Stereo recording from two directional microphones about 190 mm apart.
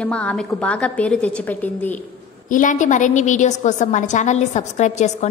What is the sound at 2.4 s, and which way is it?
A woman's voice, 45° left (ahead or behind).